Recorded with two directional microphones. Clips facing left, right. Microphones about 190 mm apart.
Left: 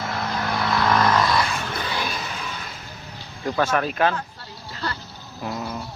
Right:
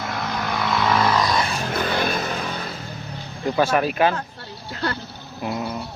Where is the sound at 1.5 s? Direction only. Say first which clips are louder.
Right 5 dB; 50° right (ahead or behind).